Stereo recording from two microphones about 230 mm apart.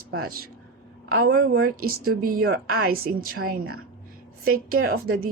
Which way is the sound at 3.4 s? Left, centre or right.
Right.